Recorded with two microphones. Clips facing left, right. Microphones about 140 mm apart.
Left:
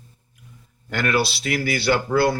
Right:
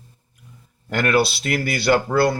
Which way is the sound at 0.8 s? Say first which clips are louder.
Right 3 dB; 50° right (ahead or behind).